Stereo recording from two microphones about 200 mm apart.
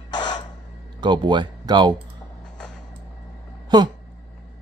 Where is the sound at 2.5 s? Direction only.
5° left (ahead or behind).